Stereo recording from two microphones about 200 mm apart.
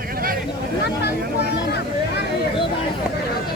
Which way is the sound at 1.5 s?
55° left (ahead or behind).